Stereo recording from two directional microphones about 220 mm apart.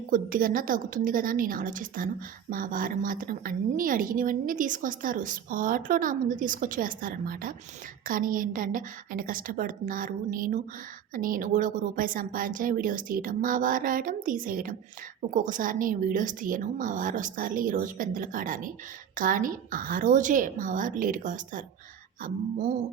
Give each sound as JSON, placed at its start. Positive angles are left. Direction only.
{"t": 0.1, "sound": "a woman's voice", "side_deg": -40}